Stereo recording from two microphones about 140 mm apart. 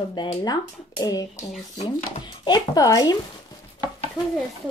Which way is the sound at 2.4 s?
30° left (ahead or behind).